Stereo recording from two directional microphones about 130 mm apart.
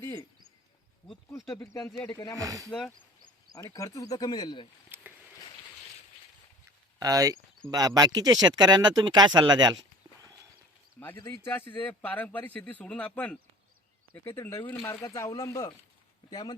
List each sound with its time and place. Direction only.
0.0 s a sound: 30° left (ahead or behind)
1.5 s speech: 20° left (ahead or behind)
2.3 s speech: 25° right (ahead or behind)
2.6 s speech: 5° left (ahead or behind)
3.5 s speech: 25° left (ahead or behind)
4.9 s rowboat: 15° right (ahead or behind)
7.0 s speech: 30° right (ahead or behind)
11.3 s speech: 15° left (ahead or behind); by 16.6 s 35° left (ahead or behind)